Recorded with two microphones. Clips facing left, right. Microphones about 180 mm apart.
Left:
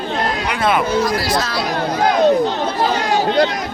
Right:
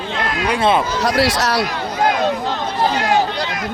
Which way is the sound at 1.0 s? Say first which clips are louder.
Right 1 dB; 70° right (ahead or behind).